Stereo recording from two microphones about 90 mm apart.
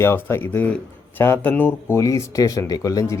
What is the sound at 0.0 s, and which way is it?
Speech, 30° left (ahead or behind).